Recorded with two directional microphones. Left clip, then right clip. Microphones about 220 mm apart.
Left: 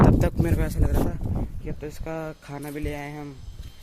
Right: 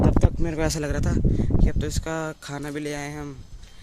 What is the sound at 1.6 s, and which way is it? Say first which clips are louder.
Speech: right 5 dB; 25° right (ahead or behind).